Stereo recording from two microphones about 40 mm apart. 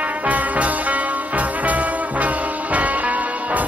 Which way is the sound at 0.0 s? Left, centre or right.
Right.